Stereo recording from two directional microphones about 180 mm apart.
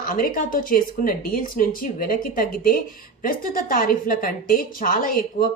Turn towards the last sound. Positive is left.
turn(degrees=50)  # may be behind; listen again after turning